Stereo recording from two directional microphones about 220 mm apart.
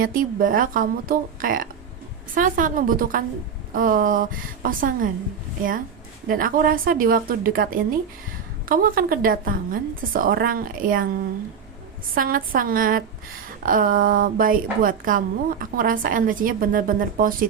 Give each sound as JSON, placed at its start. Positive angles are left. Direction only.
{"t": 0.0, "sound": "a woman's voice", "side_deg": -40}
{"t": 6.2, "sound": "a woman's voice", "side_deg": -40}
{"t": 12.1, "sound": "a woman's voice", "side_deg": -40}